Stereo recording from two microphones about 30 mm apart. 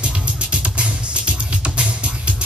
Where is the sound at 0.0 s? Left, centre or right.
Right.